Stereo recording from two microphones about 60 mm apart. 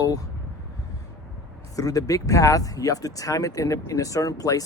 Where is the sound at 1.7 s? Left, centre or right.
Left.